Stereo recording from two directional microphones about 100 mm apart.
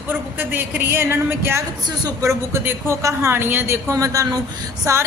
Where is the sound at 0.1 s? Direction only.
20° right (ahead or behind).